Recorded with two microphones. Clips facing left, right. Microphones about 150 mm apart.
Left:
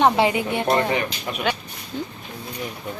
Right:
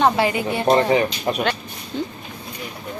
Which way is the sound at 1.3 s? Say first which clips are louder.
Right 7 dB; 40° right (ahead or behind).